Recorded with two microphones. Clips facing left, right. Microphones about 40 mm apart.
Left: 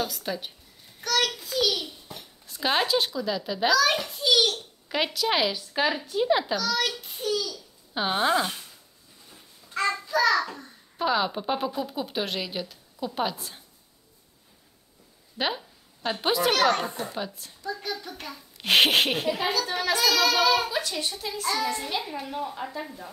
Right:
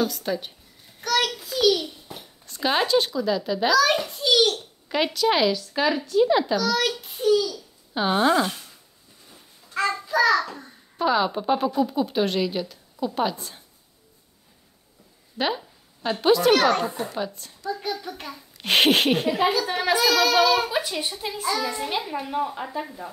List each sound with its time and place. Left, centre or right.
0.0 s speech: centre
1.0 s a sound: centre
2.4 s a child's voice: centre
5.5 s a child's voice: centre
9.3 s a sound: centre
11.0 s speech: centre
15.3 s speech: centre
17.6 s a sound: centre
18.6 s speech: centre
19.4 s a woman's voice: centre
20.1 s speech: centre
20.7 s a woman's voice: centre